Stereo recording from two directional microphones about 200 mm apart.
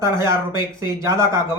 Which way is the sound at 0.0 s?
15° right (ahead or behind).